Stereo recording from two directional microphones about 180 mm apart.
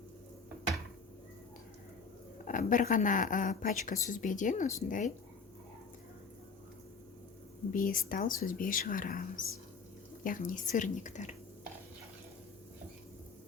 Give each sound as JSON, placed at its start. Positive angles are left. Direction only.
{"t": 2.4, "sound": "speech", "side_deg": 45}
{"t": 7.7, "sound": "speech", "side_deg": 50}